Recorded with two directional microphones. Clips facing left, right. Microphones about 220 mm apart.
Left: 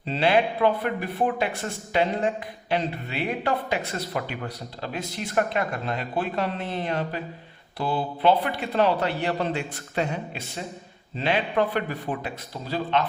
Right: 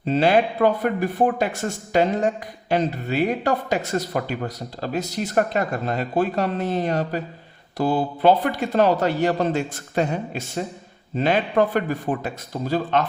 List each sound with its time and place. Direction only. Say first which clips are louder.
0.0 s speech: right 4 dB; 45° right (ahead or behind)